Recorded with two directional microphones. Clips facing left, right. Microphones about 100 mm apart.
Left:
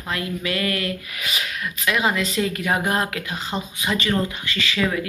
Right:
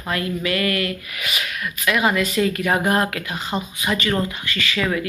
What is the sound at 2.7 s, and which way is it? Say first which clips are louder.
Speech: right 2 dB; 35° right (ahead or behind).